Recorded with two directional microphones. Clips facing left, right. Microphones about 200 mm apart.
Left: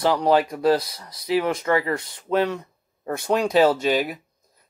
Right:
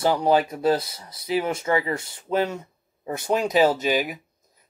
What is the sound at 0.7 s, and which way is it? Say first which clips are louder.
Speech: left 3 dB; 25° right (ahead or behind).